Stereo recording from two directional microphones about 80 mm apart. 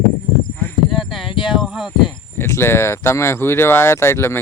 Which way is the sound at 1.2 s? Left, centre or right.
Left.